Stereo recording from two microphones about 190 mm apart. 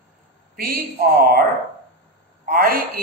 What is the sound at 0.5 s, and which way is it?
Speech, 50° right (ahead or behind).